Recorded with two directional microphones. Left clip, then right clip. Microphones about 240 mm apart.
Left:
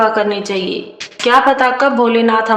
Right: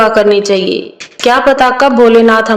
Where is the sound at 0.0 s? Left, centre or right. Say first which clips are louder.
Right 6 dB; right.